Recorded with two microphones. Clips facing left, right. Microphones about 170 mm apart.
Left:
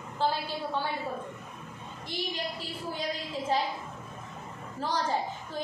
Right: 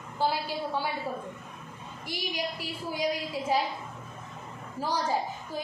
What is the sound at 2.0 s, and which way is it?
A woman's voice, 10° right (ahead or behind).